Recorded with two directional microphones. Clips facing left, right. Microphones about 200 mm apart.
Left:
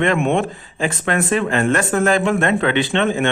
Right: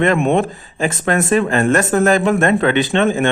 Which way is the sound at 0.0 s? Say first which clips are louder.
Right 3 dB; 40° right (ahead or behind).